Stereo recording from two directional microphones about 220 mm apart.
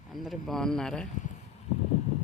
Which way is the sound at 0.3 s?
Centre (ahead or behind).